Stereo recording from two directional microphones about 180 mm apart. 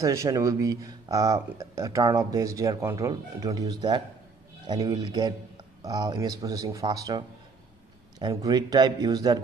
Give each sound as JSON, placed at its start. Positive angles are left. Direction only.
{"t": 0.0, "sound": "speech", "side_deg": -15}